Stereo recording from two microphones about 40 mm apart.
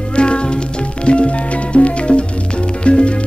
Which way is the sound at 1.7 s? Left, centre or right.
Left.